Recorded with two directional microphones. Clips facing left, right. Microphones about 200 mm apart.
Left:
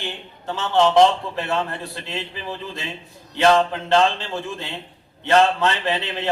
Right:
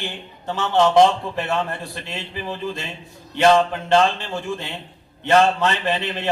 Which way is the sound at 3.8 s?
15° right (ahead or behind).